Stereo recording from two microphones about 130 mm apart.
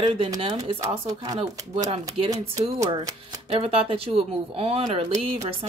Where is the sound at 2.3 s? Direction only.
25° right (ahead or behind).